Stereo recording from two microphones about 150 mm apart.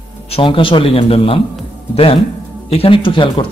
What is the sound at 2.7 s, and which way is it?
Speech, 35° left (ahead or behind).